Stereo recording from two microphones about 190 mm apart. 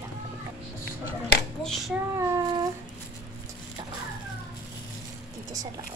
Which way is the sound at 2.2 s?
15° right (ahead or behind).